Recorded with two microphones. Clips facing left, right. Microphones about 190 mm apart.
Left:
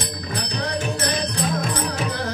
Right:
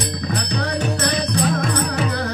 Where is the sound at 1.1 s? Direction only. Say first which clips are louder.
Right 4 dB; 65° right (ahead or behind).